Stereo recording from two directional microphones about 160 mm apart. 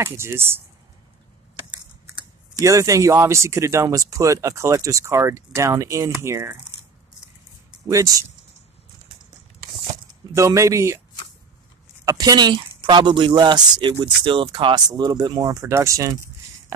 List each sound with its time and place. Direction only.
0.0 s speech: 15° right (ahead or behind)
2.5 s speech: 20° right (ahead or behind)
7.8 s speech: 20° right (ahead or behind)
10.3 s speech: 20° right (ahead or behind)
12.0 s speech: 20° right (ahead or behind)